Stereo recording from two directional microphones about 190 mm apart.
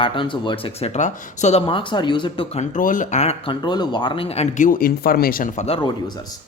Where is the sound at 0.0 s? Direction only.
25° left (ahead or behind); by 5.6 s 45° left (ahead or behind).